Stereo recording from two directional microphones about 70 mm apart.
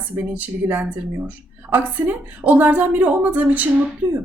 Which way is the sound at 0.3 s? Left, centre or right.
Right.